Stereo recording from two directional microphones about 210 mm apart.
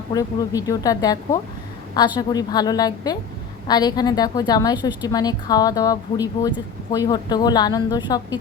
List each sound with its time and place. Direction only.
0.1 s a woman's voice: 15° left (ahead or behind)